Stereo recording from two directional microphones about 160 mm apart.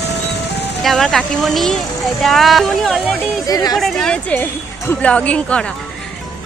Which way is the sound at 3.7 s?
Centre (ahead or behind).